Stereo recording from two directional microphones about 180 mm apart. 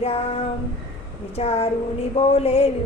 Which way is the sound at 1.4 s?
35° left (ahead or behind).